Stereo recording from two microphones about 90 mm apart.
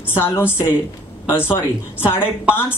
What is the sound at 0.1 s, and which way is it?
Speech, 25° left (ahead or behind).